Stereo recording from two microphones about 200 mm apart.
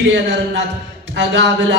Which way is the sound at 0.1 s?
60° right (ahead or behind).